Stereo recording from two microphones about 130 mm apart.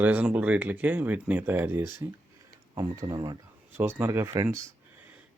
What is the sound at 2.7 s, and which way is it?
Speech, 30° right (ahead or behind).